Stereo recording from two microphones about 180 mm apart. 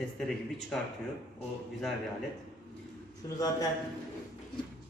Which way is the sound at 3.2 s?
20° left (ahead or behind).